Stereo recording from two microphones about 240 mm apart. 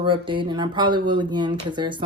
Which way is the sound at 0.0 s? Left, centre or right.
Right.